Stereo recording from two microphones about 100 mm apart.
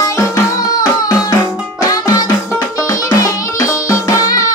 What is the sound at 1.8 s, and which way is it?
Music, 35° left (ahead or behind).